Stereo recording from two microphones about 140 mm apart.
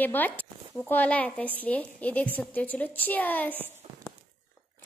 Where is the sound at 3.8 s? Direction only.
45° right (ahead or behind).